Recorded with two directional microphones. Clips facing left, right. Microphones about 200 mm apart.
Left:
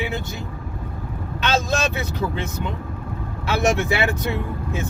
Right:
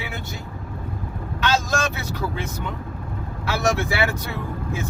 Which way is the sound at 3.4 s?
20° left (ahead or behind).